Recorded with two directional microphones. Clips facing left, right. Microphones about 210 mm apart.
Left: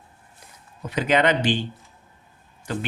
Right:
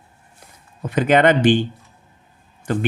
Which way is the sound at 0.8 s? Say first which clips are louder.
Right 5 dB; 50° right (ahead or behind).